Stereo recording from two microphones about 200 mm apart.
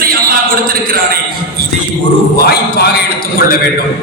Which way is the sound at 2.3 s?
50° left (ahead or behind).